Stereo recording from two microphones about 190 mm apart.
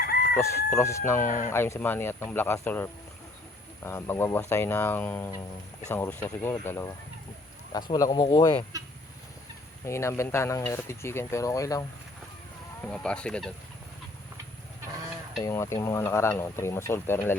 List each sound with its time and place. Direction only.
0.7 s speech: 15° left (ahead or behind)
1.2 s speech: 45° left (ahead or behind)
1.5 s speech: 15° left (ahead or behind)
9.8 s speech: 15° left (ahead or behind)
12.8 s speech: 5° left (ahead or behind)
15.4 s speech: 15° left (ahead or behind)